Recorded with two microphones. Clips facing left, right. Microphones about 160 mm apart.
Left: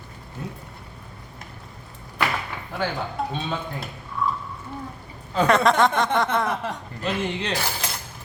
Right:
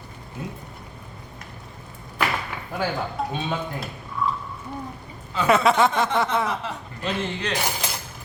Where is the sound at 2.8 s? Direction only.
5° right (ahead or behind).